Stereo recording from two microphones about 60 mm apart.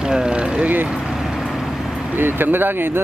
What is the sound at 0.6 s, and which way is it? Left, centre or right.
Speech, right.